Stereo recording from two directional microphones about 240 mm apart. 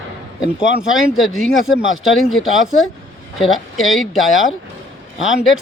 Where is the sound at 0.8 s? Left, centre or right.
Centre.